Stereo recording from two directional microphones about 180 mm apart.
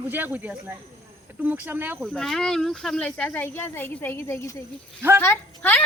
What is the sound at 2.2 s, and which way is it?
A woman's voice, 5° left (ahead or behind).